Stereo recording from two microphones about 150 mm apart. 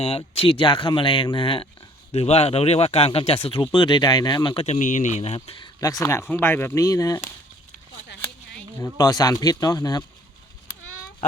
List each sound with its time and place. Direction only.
0.0 s speech: 40° left (ahead or behind)
4.6 s speech: 50° left (ahead or behind); by 7.3 s 25° left (ahead or behind)
8.8 s speech: 25° left (ahead or behind)